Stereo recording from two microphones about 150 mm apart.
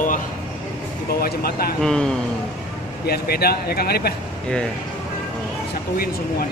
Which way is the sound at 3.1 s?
90° left.